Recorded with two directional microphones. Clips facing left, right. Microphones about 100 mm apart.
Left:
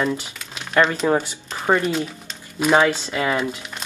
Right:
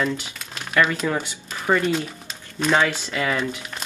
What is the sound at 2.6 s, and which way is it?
Speech, 15° left (ahead or behind).